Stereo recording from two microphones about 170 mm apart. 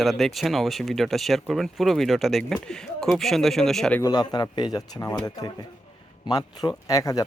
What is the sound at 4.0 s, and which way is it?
Speech, 25° left (ahead or behind).